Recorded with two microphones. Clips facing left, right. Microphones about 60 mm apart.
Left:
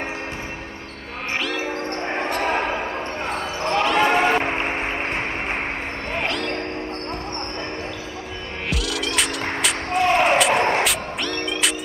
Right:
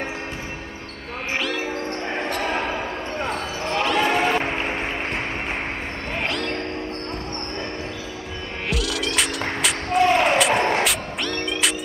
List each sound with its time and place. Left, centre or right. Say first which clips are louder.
1.4 s basketball bounce: left 1 dB; centre
2.0 s basketball bounce: left 4 dB; left
2.5 s basketball bounce: left 2 dB; centre
4.0 s a sound: left 3 dB; left
4.5 s music: left 1 dB; left
6.1 s music: left 1 dB; centre
8.6 s music: right 1 dB; centre
9.9 s slam: even; centre
10.8 s music: left 1 dB; centre